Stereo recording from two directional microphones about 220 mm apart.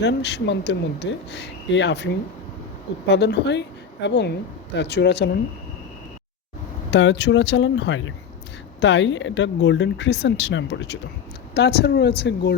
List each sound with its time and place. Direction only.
0.0 s a woman's voice: 50° left (ahead or behind)
6.9 s a woman's voice: 55° left (ahead or behind)